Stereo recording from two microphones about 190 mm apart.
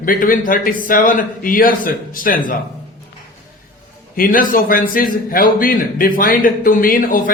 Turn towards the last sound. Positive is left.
turn(degrees=45)  # may be behind; listen again after turning